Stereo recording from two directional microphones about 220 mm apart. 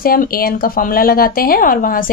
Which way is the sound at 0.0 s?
40° left (ahead or behind).